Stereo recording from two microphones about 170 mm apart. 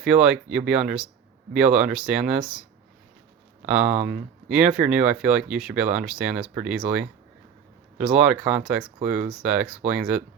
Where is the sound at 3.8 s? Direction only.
45° right (ahead or behind).